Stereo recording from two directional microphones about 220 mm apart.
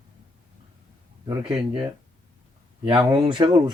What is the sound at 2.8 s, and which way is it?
Speech, 20° right (ahead or behind).